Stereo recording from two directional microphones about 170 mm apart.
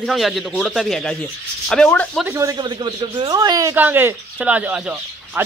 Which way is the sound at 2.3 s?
20° right (ahead or behind).